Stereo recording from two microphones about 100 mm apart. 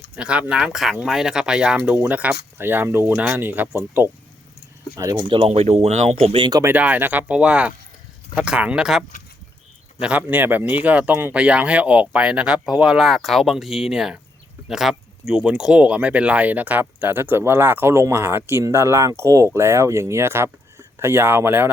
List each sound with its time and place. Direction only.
0.2 s speech: 10° right (ahead or behind)
3.1 s speech: 10° right (ahead or behind)
5.3 s speech: 75° right (ahead or behind)
6.7 s speech: 15° right (ahead or behind)